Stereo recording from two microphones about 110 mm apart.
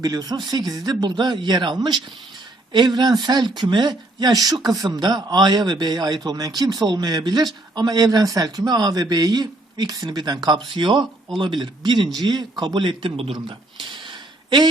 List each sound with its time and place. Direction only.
0.0 s a man's voice: 35° right (ahead or behind)